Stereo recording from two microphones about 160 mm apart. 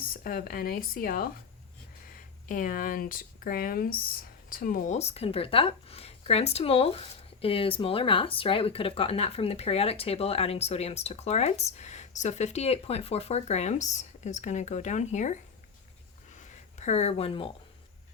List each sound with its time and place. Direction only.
0.0 s speech: 65° left (ahead or behind)
4.9 s speech: 40° left (ahead or behind)
16.3 s a sound: 50° left (ahead or behind)